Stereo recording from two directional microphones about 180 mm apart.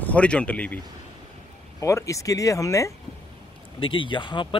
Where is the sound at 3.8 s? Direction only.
30° left (ahead or behind).